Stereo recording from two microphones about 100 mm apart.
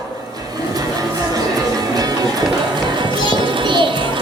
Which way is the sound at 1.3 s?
40° right (ahead or behind).